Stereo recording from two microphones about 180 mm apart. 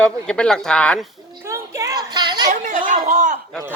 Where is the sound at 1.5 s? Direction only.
15° right (ahead or behind).